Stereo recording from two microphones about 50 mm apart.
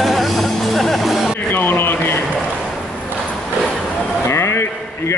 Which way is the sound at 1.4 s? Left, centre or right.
Left.